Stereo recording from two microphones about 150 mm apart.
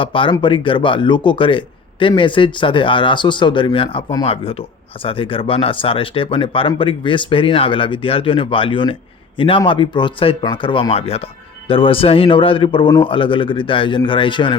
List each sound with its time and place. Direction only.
0.0 s speech: 35° left (ahead or behind)